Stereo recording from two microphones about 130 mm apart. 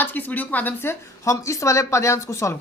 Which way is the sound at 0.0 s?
15° left (ahead or behind).